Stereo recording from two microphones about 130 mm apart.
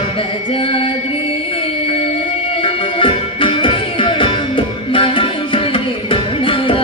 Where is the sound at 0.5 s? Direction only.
45° left (ahead or behind).